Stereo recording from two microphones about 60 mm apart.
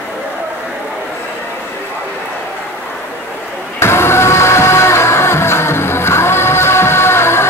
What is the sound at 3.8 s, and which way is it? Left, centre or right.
Music, left.